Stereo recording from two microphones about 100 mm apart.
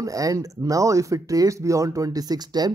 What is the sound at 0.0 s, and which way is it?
Speech, 35° right (ahead or behind).